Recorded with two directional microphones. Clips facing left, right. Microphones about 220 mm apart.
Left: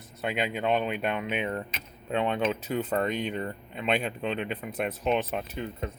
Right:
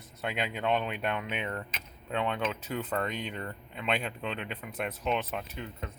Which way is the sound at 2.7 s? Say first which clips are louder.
Left 4 dB; 25° left (ahead or behind).